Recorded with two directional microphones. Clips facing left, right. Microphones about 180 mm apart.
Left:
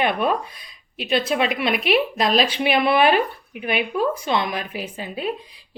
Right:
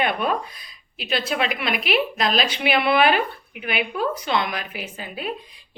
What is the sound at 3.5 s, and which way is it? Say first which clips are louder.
A woman's voice: left 3 dB; 30° left (ahead or behind).